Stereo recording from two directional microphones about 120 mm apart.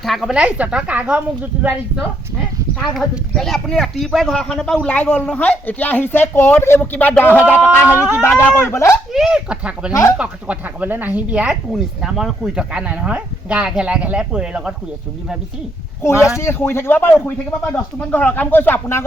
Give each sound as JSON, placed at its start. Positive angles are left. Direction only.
{"t": 0.0, "sound": "speech", "side_deg": 0}
{"t": 2.7, "sound": "speech", "side_deg": 0}
{"t": 9.1, "sound": "speech", "side_deg": -5}
{"t": 9.9, "sound": "speech", "side_deg": 25}
{"t": 10.2, "sound": "speech", "side_deg": -10}
{"t": 16.4, "sound": "speech", "side_deg": 20}